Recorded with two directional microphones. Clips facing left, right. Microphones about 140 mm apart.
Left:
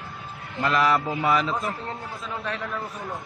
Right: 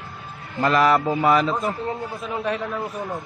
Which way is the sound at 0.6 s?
50° right (ahead or behind).